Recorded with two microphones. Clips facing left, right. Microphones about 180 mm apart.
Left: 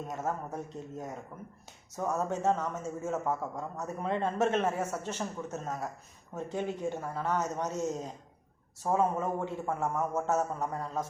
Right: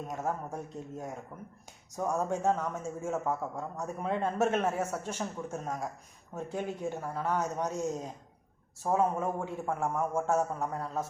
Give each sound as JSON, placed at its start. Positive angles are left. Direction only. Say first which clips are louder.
{"t": 0.0, "sound": "a man's voice", "louder": "even", "side_deg": -10}